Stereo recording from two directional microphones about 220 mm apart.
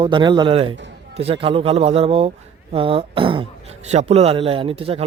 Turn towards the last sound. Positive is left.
turn(degrees=-25)  # may be behind; listen again after turning